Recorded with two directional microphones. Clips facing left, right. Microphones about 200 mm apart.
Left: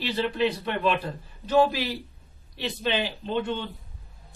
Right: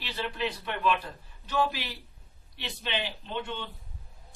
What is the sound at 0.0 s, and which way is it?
Speech, 30° left (ahead or behind).